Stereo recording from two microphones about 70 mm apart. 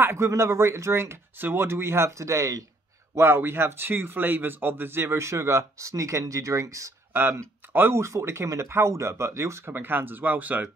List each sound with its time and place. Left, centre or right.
0.0 s a man's voice: right
3.2 s a man's voice: right
7.1 s a man's voice: right